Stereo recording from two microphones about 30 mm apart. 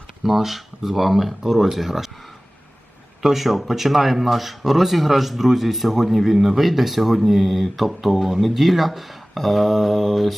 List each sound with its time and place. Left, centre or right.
0.2 s speech: centre
3.2 s speech: centre